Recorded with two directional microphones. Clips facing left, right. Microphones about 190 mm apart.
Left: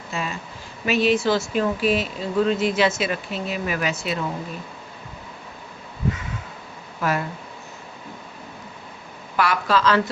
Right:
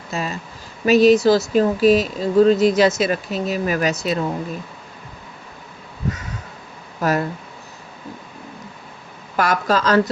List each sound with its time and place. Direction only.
0.1 s speech: 40° right (ahead or behind)
7.0 s speech: 40° right (ahead or behind)
9.3 s a woman's voice: 45° right (ahead or behind)